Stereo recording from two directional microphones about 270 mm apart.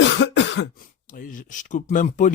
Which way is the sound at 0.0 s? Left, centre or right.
Left.